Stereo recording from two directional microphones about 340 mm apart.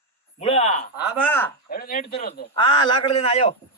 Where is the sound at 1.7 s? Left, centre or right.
Left.